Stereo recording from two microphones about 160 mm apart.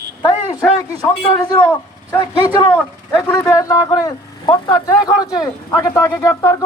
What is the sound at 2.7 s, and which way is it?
Speech, 15° left (ahead or behind).